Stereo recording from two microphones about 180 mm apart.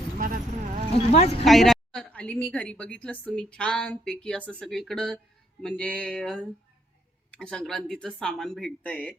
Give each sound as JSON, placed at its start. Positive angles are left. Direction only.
{"t": 0.2, "sound": "a sound", "side_deg": -45}
{"t": 0.9, "sound": "speech", "side_deg": 35}
{"t": 1.5, "sound": "a woman's voice", "side_deg": 0}